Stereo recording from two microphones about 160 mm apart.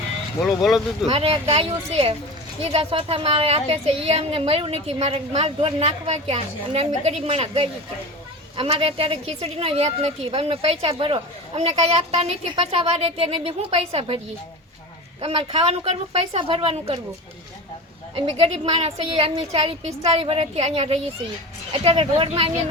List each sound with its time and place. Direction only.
0.4 s speech: centre (ahead or behind)
1.0 s a woman's voice: 40° right (ahead or behind)
15.2 s a woman's voice: 40° right (ahead or behind)
18.3 s a woman's voice: 40° right (ahead or behind)